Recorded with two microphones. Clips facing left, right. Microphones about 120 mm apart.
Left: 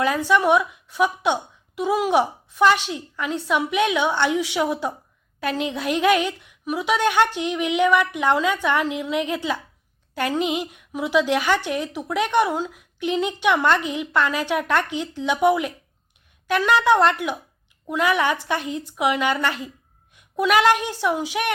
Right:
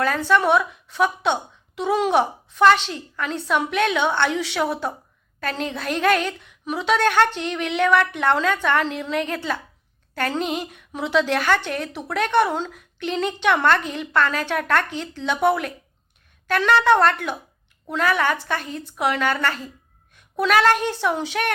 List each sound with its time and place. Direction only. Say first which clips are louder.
0.0 s a woman's voice: even; 15° left (ahead or behind)